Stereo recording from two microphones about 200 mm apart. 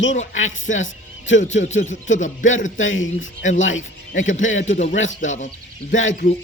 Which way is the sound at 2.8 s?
75° left (ahead or behind).